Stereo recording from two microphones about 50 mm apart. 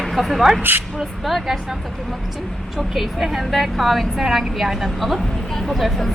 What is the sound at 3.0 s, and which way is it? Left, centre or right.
Speech, centre.